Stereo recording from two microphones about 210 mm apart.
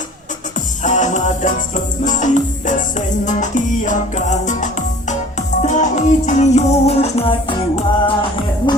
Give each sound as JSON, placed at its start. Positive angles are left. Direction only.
{"t": 0.8, "sound": "music", "side_deg": 35}